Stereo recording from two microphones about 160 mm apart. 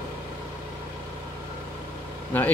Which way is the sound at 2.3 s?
10° left (ahead or behind).